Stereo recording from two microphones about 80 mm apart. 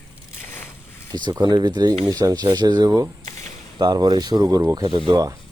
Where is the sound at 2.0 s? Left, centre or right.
Right.